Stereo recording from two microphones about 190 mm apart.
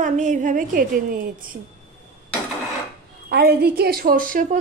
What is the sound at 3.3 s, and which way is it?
A woman's voice, 55° right (ahead or behind).